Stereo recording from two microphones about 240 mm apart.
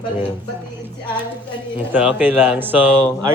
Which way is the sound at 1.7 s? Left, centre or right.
Centre.